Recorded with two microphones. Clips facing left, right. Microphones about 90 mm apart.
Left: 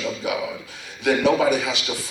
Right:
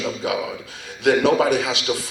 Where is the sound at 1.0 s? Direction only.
75° right (ahead or behind).